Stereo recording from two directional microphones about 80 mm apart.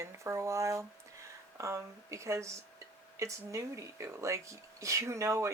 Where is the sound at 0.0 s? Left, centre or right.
Right.